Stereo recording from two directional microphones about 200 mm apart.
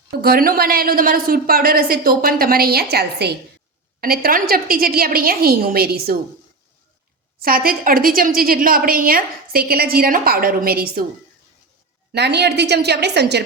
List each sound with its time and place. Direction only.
0.2 s a woman's voice: 50° right (ahead or behind)
7.4 s a woman's voice: 45° right (ahead or behind)
12.1 s a woman's voice: 55° right (ahead or behind)